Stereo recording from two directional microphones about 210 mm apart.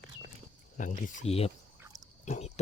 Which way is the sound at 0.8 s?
40° left (ahead or behind).